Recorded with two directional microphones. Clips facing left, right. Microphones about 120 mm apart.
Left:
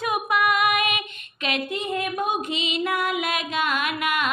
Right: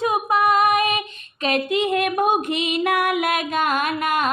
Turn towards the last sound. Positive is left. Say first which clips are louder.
# right 4 dB
turn(degrees=-40)  # may be behind; listen again after turning